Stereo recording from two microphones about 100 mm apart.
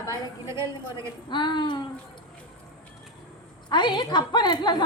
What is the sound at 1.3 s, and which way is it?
Speech, 50° left (ahead or behind).